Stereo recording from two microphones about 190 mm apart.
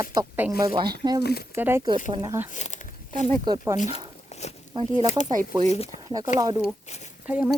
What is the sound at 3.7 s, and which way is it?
Speech, 40° left (ahead or behind).